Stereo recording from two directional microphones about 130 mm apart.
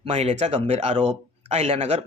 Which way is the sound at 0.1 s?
55° right (ahead or behind).